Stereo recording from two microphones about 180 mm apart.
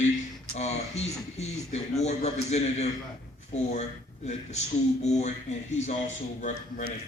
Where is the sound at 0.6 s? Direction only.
35° left (ahead or behind).